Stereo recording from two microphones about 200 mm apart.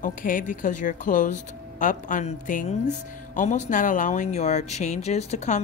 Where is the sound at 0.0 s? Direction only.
45° left (ahead or behind).